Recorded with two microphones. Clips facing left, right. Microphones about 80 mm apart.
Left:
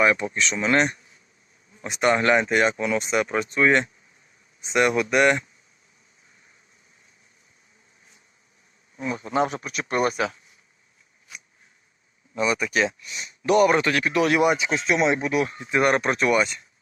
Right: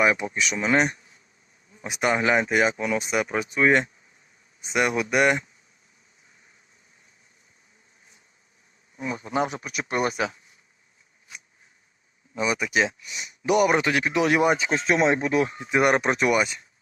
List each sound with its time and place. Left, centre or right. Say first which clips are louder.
0.0 s speech: left 1 dB; centre
2.7 s speech: left 1 dB; centre
3.0 s speech: left 2 dB; centre
9.0 s speech: left 2 dB; centre
12.3 s speech: left 1 dB; centre
15.7 s speech: even; centre